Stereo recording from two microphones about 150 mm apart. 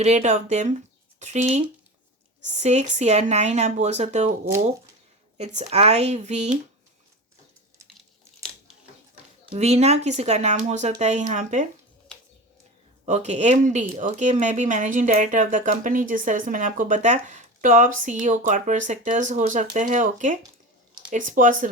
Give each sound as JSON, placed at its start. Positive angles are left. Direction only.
{"t": 0.0, "sound": "speech", "side_deg": -50}
{"t": 5.4, "sound": "speech", "side_deg": -50}
{"t": 9.5, "sound": "speech", "side_deg": -45}
{"t": 13.1, "sound": "speech", "side_deg": -50}